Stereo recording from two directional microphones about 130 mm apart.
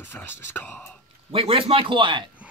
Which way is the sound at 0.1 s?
15° left (ahead or behind).